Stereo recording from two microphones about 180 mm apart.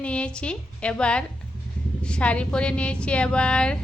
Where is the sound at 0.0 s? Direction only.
5° left (ahead or behind).